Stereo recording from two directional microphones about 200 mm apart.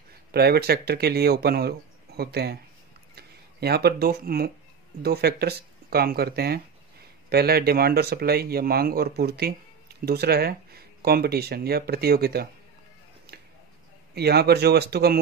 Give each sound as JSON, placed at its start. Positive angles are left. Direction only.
{"t": 0.3, "sound": "speech", "side_deg": -50}
{"t": 14.1, "sound": "speech", "side_deg": -55}